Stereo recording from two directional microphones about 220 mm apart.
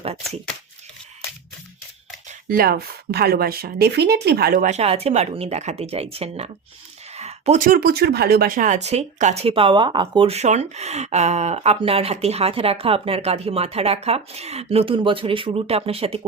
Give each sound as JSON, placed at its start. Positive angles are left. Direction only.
{"t": 2.5, "sound": "speech", "side_deg": -45}